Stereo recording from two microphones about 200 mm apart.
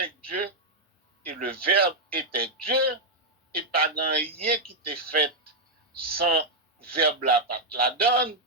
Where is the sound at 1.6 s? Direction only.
50° right (ahead or behind).